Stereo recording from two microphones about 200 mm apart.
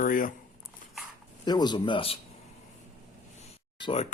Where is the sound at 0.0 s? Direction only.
45° left (ahead or behind).